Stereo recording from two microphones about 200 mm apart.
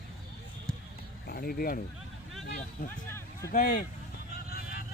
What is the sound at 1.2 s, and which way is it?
Speech, 50° left (ahead or behind).